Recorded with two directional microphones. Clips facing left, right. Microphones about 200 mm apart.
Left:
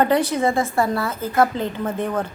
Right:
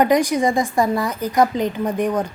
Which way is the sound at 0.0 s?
15° right (ahead or behind).